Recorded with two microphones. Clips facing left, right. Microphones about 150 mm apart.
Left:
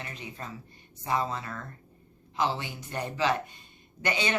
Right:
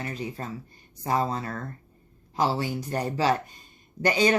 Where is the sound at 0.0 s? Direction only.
40° right (ahead or behind).